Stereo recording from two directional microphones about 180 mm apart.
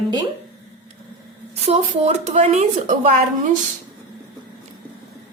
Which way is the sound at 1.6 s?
35° right (ahead or behind).